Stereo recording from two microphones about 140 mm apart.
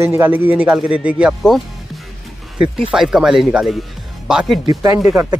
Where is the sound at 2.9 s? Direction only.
5° right (ahead or behind).